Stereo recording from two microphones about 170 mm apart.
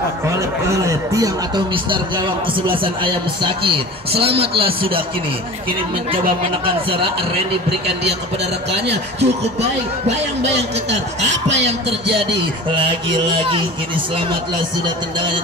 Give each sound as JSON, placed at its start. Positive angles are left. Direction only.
{"t": 0.3, "sound": "speech", "side_deg": -20}
{"t": 6.1, "sound": "speech", "side_deg": -30}
{"t": 9.2, "sound": "speech", "side_deg": -40}
{"t": 11.2, "sound": "speech", "side_deg": -90}
{"t": 12.7, "sound": "speech", "side_deg": -30}